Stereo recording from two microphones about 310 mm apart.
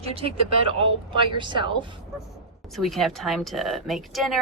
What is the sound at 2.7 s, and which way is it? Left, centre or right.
Speech, centre.